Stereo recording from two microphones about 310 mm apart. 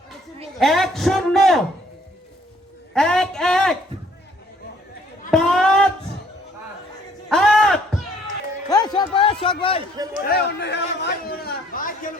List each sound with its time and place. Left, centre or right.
0.6 s a man's voice: centre
2.9 s a man's voice: centre
5.3 s music: centre
7.3 s a sound: centre
9.0 s a man's voice: centre
10.2 s a man's voice: left